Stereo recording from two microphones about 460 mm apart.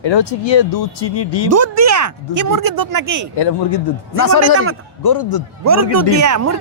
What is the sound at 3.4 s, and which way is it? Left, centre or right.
Speech, left.